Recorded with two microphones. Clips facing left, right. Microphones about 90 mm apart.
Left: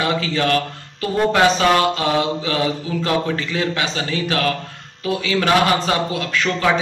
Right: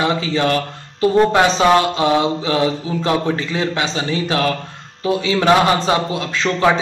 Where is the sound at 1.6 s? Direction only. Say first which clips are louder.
Right 3 dB; 25° right (ahead or behind).